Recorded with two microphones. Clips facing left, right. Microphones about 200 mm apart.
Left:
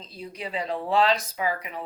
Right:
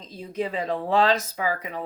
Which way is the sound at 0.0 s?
45° right (ahead or behind).